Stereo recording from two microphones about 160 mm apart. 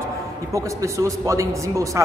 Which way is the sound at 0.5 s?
20° right (ahead or behind).